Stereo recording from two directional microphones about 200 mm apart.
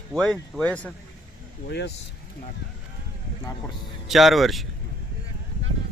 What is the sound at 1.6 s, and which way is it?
Speech, 55° left (ahead or behind).